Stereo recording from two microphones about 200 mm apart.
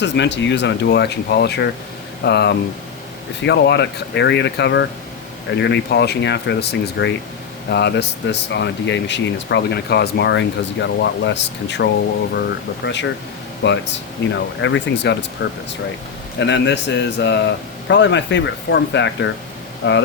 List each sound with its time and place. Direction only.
0.0 s speech: 60° left (ahead or behind)
16.4 s speech: 60° left (ahead or behind)